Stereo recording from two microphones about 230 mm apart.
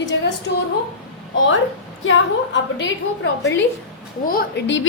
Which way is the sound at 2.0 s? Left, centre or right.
Left.